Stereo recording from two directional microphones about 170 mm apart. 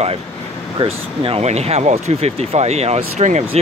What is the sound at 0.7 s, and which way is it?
Speech, 35° right (ahead or behind).